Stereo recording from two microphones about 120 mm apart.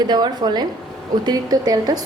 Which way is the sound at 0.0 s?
35° right (ahead or behind).